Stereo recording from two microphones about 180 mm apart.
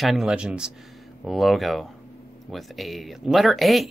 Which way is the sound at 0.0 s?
Centre (ahead or behind).